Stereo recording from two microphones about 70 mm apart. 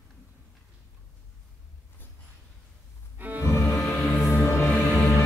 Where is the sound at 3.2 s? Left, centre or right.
Right.